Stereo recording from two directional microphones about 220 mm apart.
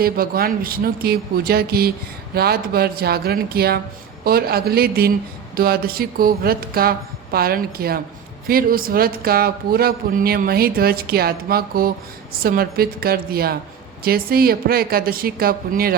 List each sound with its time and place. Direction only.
0.0 s speech: 45° right (ahead or behind)